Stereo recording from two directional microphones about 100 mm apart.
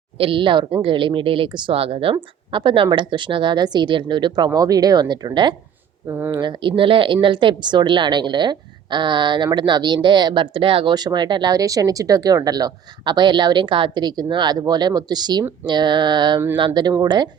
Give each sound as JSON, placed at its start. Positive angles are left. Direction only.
{"t": 0.2, "sound": "speech", "side_deg": -60}
{"t": 2.1, "sound": "speech", "side_deg": -55}
{"t": 6.0, "sound": "speech", "side_deg": -20}
{"t": 6.4, "sound": "speech", "side_deg": -55}
{"t": 10.9, "sound": "speech", "side_deg": -45}